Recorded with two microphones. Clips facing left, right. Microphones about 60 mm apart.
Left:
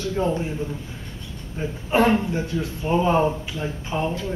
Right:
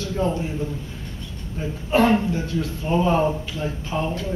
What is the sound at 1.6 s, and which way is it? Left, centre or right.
Speech, centre.